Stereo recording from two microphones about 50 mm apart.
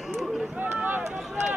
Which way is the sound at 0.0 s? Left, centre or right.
Centre.